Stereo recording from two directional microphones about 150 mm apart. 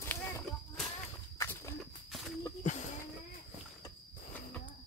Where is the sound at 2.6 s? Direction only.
55° left (ahead or behind).